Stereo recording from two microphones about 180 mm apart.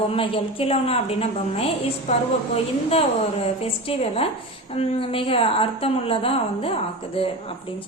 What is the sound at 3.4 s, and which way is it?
A woman's voice, 35° left (ahead or behind).